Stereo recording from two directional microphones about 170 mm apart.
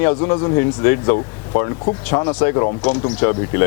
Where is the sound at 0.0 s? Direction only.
15° left (ahead or behind).